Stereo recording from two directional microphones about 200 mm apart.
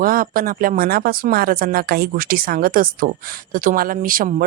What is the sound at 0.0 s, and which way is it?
Speech, 45° right (ahead or behind).